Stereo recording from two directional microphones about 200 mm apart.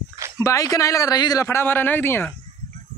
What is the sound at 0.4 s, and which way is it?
A man's voice, 15° left (ahead or behind).